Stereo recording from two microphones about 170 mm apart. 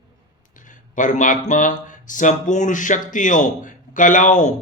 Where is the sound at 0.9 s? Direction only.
50° left (ahead or behind).